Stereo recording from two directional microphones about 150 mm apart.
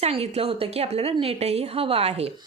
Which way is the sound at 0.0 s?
40° right (ahead or behind).